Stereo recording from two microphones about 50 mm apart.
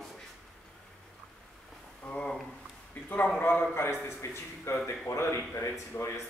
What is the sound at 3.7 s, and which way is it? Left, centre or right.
A man's voice, left.